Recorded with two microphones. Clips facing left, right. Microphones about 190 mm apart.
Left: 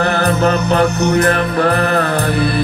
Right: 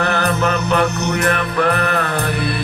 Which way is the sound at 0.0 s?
35° left (ahead or behind).